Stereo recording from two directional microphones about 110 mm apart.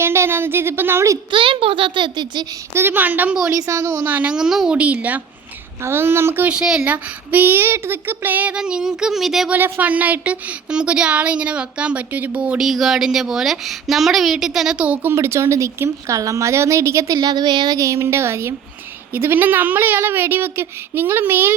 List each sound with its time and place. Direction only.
0.0 s a woman's voice: 20° right (ahead or behind)
1.3 s a child's voice: 50° right (ahead or behind)
2.7 s speech: 20° right (ahead or behind)
3.5 s a woman's voice: 30° right (ahead or behind)
4.0 s speech: 15° right (ahead or behind)
9.6 s speech: 20° right (ahead or behind)
15.1 s a woman's voice: 25° right (ahead or behind)
17.2 s a woman's voice: 40° right (ahead or behind); by 21.5 s 20° right (ahead or behind)